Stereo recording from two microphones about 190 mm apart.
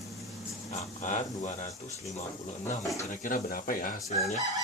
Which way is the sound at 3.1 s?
45° left (ahead or behind).